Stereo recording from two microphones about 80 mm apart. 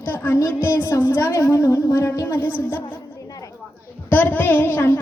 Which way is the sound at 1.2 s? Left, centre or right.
Left.